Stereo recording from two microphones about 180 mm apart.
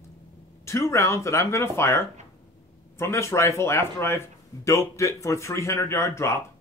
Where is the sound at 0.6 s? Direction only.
15° left (ahead or behind).